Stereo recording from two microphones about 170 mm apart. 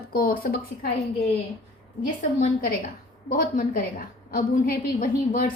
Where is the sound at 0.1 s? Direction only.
60° left (ahead or behind).